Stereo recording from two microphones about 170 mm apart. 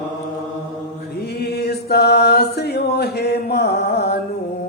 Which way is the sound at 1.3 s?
75° left (ahead or behind).